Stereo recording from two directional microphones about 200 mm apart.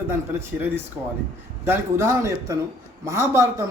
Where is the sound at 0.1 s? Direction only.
15° right (ahead or behind).